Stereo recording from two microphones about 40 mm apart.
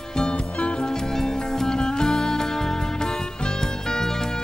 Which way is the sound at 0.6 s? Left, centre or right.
Left.